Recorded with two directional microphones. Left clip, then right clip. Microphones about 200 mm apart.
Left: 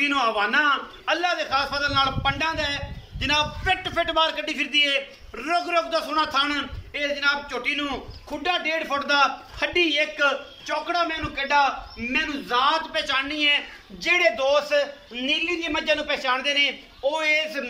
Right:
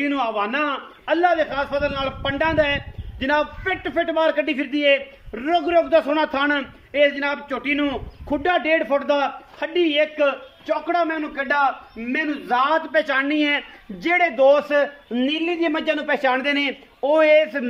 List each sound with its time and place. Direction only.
0.0 s a man's voice: 25° right (ahead or behind); by 17.6 s 40° right (ahead or behind)